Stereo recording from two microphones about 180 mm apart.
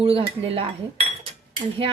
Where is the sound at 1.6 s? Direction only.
30° right (ahead or behind).